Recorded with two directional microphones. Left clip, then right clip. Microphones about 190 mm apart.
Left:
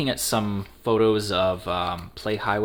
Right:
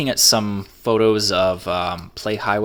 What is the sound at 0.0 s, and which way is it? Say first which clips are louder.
Speech: right 8 dB; 40° right (ahead or behind).